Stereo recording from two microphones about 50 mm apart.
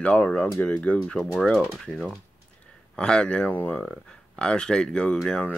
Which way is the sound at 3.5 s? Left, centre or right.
Left.